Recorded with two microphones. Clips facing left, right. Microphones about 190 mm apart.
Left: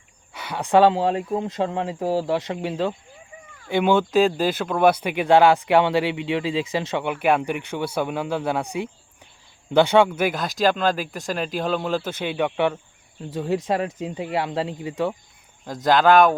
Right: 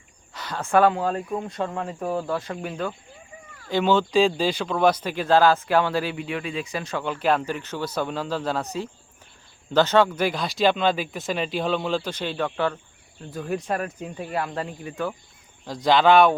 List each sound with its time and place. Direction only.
0.3 s speech: 10° left (ahead or behind); by 2.9 s 25° left (ahead or behind)
3.8 s speech: 10° left (ahead or behind)
15.6 s speech: centre (ahead or behind)